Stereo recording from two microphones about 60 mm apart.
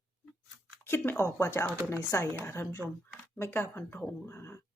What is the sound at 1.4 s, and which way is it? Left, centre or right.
Speech, left.